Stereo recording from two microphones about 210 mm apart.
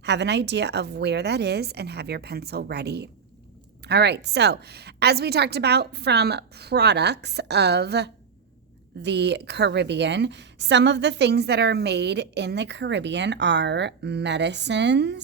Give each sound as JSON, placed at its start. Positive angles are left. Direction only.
{"t": 0.0, "sound": "a woman's voice", "side_deg": -55}